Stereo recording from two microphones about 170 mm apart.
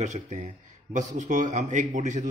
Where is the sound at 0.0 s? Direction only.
45° right (ahead or behind).